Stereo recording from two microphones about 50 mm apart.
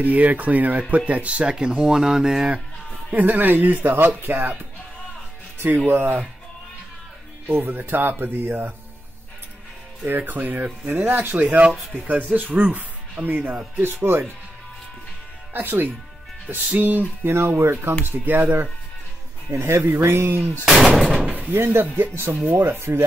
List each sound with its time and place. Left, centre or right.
0.0 s speech: right; by 2.6 s centre
3.1 s speech: right
5.9 s speech: right
7.4 s speech: right
10.0 s speech: right
11.4 s speech: right
15.5 s speech: right
17.2 s speech: right
19.5 s speech: right
20.6 s gunshot: centre
21.3 s speech: right
21.5 s speech: right
22.1 s speech: right